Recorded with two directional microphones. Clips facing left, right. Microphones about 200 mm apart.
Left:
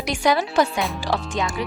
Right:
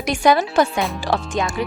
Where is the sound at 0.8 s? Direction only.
Centre (ahead or behind).